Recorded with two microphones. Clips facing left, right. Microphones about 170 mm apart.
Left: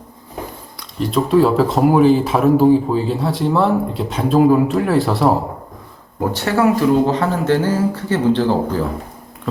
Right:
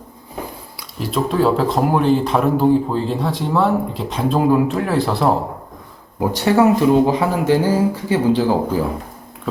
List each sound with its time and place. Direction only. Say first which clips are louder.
0.8 s speech: left 3 dB; 5° right (ahead or behind)
6.1 s speech: right 3 dB; 15° right (ahead or behind)